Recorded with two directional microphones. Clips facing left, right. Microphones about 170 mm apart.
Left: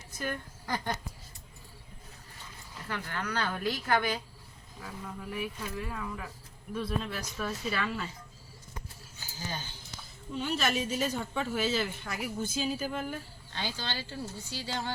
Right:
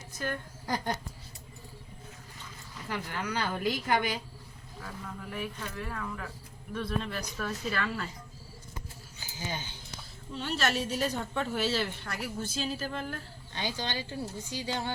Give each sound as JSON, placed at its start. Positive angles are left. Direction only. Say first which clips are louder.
{"t": 2.9, "sound": "speech", "louder": "right 1 dB", "side_deg": -10}
{"t": 4.8, "sound": "a woman's voice", "louder": "even", "side_deg": 10}
{"t": 9.5, "sound": "speech", "louder": "right 2 dB", "side_deg": -15}
{"t": 10.3, "sound": "a woman's voice", "louder": "even", "side_deg": 5}
{"t": 13.5, "sound": "speech", "louder": "right 2 dB", "side_deg": -15}